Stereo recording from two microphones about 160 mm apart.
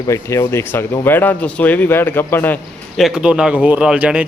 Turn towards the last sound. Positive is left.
turn(degrees=-10)  # may be behind; listen again after turning